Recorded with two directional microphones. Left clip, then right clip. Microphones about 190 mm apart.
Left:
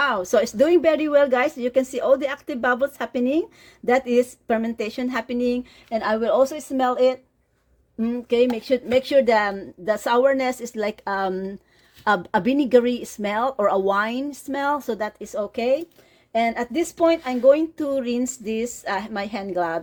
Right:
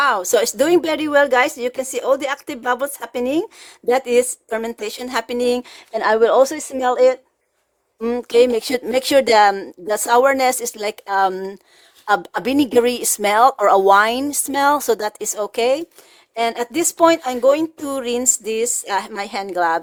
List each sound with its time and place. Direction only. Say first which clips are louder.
0.0 s a woman's voice: right 4 dB; 25° right (ahead or behind)
8.0 s speech: right 6 dB; 55° right (ahead or behind); by 19.8 s 30° right (ahead or behind)